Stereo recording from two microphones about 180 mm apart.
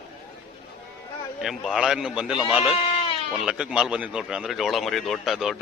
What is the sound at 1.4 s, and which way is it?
Speech, centre (ahead or behind).